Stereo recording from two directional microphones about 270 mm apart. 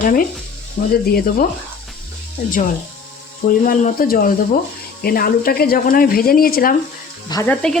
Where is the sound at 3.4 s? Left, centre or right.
Left.